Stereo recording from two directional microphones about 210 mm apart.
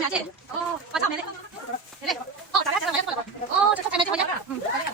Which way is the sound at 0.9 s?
5° right (ahead or behind).